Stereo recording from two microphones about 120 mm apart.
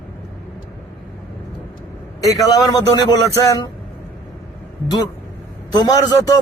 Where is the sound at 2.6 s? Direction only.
30° left (ahead or behind).